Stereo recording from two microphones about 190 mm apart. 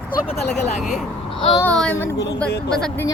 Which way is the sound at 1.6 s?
5° left (ahead or behind).